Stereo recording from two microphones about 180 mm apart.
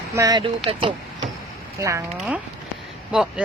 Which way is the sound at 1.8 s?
15° right (ahead or behind).